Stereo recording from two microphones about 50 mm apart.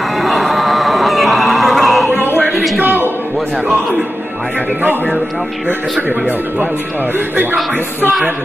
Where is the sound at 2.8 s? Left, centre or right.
Right.